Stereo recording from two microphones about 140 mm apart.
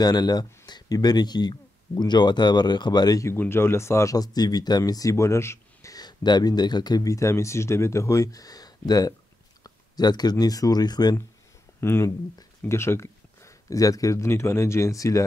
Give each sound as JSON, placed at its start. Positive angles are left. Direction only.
{"t": 0.0, "sound": "speech", "side_deg": 30}